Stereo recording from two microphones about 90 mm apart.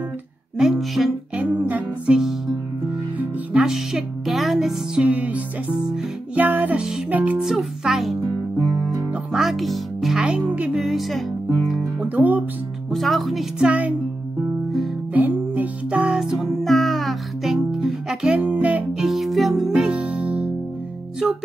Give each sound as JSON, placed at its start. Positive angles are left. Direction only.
{"t": 0.6, "sound": "speech", "side_deg": 0}
{"t": 1.3, "sound": "music", "side_deg": -15}
{"t": 2.1, "sound": "music", "side_deg": -5}
{"t": 5.0, "sound": "music", "side_deg": -15}
{"t": 7.4, "sound": "speech", "side_deg": -5}
{"t": 8.5, "sound": "guitar", "side_deg": 10}
{"t": 9.1, "sound": "music", "side_deg": -5}
{"t": 10.8, "sound": "music", "side_deg": 0}
{"t": 12.0, "sound": "speech", "side_deg": -20}
{"t": 12.9, "sound": "speech", "side_deg": 0}
{"t": 13.7, "sound": "music", "side_deg": -15}
{"t": 15.1, "sound": "music", "side_deg": -20}
{"t": 18.9, "sound": "music", "side_deg": -5}